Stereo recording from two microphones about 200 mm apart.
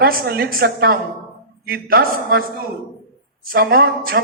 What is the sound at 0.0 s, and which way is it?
A man's voice, 55° right (ahead or behind).